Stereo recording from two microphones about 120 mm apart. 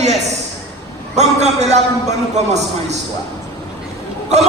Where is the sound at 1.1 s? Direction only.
70° right (ahead or behind).